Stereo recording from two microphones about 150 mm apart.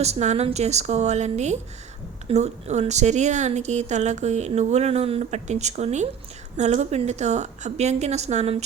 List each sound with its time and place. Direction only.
0.0 s speech: 50° right (ahead or behind)